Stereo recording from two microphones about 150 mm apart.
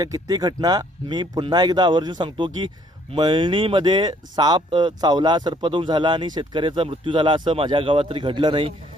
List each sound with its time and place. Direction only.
0.0 s speech: 25° right (ahead or behind)